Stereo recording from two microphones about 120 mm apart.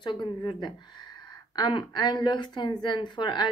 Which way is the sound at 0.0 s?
40° left (ahead or behind).